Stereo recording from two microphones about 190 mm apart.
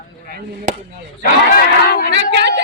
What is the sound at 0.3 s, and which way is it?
Speech, 50° right (ahead or behind).